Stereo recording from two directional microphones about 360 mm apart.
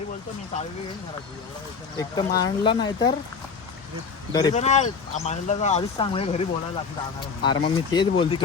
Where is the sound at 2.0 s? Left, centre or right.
Centre.